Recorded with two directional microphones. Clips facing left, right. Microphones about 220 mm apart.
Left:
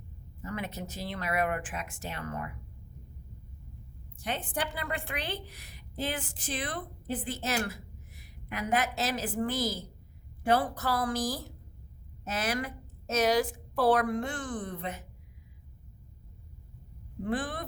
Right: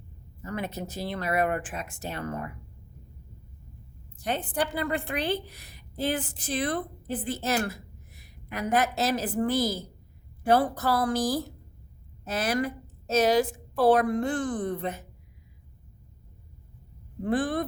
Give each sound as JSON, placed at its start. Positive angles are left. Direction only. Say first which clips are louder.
{"t": 0.5, "sound": "a woman's voice", "louder": "right 4 dB", "side_deg": -35}
{"t": 4.2, "sound": "a woman's voice", "louder": "right 5 dB", "side_deg": -40}
{"t": 17.2, "sound": "a woman's voice", "louder": "right 7 dB", "side_deg": -35}